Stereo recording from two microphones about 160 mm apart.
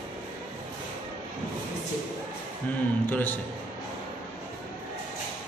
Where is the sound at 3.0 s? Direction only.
10° left (ahead or behind).